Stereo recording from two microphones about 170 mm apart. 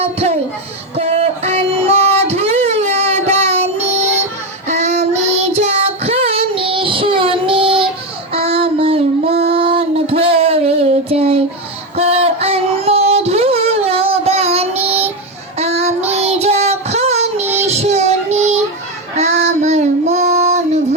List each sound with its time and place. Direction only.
0.0 s a sound: 35° right (ahead or behind)
0.9 s music: 40° right (ahead or behind)
4.7 s child singing: 40° right (ahead or behind)
9.4 s female singing: 35° right (ahead or behind)
11.9 s a sound: 35° right (ahead or behind)
15.5 s child singing: 40° right (ahead or behind)